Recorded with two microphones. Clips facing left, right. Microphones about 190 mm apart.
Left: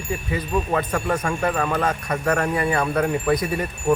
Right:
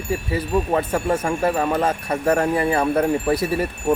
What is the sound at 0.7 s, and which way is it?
Speech, 25° right (ahead or behind).